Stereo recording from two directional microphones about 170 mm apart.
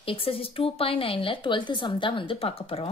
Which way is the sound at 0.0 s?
35° left (ahead or behind).